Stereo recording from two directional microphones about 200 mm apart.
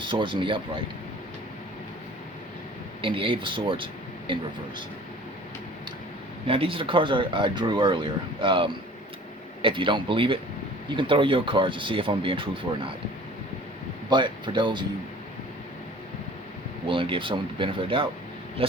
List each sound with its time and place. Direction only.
0.0 s speech: 25° right (ahead or behind)
3.0 s speech: 25° right (ahead or behind)
6.5 s speech: 25° right (ahead or behind)
14.1 s speech: 25° right (ahead or behind)
16.8 s speech: 25° right (ahead or behind)